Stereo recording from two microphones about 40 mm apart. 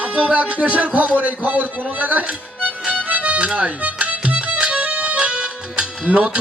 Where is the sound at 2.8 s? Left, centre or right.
Right.